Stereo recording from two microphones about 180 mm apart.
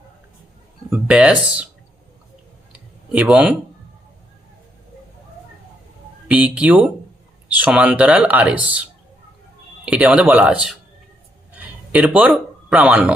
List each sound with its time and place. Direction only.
0.9 s speech: 10° right (ahead or behind)
2.7 s a sound: 5° right (ahead or behind)
6.2 s a man's voice: 10° right (ahead or behind)